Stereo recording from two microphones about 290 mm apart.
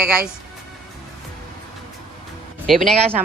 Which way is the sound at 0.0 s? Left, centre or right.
Centre.